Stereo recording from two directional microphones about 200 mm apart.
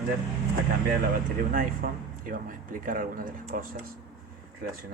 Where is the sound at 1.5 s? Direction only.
45° right (ahead or behind).